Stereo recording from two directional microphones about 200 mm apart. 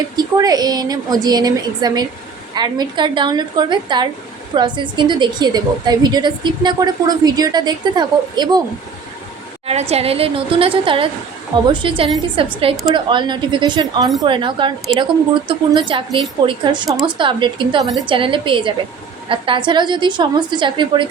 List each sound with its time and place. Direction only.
0.2 s a woman's voice: 20° right (ahead or behind)
9.9 s a woman's voice: 30° right (ahead or behind)